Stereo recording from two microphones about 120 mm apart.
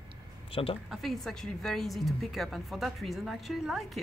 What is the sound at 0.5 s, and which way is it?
Speech, 50° left (ahead or behind).